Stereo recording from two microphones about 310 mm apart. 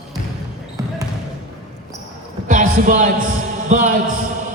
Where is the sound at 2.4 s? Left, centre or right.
Right.